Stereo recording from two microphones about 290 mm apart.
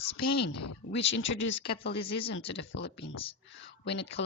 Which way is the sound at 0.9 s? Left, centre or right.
Left.